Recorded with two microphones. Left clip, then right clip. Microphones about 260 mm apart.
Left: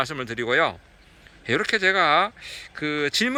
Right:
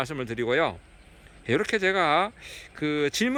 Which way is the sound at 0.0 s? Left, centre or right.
Centre.